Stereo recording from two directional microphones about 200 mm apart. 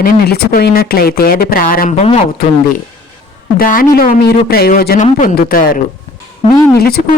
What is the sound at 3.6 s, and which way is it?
Speech, 45° left (ahead or behind).